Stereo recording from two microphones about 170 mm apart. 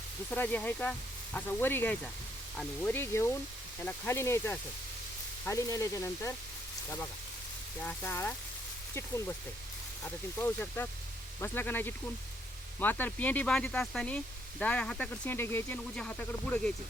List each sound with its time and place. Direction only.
0.3 s speech: 10° left (ahead or behind)
7.8 s speech: 10° left (ahead or behind)
10.0 s speech: 10° left (ahead or behind)